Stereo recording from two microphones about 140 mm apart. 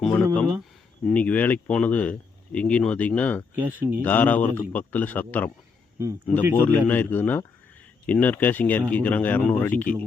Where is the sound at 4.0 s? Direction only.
10° left (ahead or behind).